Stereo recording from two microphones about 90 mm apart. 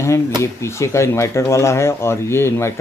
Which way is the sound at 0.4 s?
30° left (ahead or behind).